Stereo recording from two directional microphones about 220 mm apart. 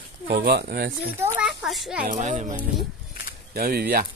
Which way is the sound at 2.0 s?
35° right (ahead or behind).